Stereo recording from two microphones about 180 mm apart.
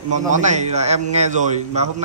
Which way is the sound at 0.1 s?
40° right (ahead or behind).